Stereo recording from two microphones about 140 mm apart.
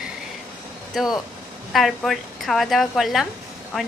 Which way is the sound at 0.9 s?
Centre (ahead or behind).